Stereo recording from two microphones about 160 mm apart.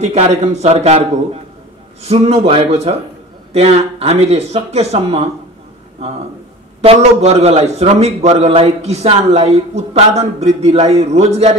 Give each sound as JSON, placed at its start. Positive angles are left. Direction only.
{"t": 0.0, "sound": "a man's voice", "side_deg": -45}